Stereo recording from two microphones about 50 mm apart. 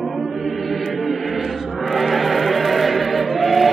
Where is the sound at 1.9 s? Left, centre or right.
Centre.